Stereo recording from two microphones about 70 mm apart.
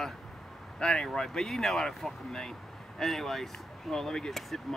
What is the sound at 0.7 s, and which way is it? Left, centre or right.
Speech, centre.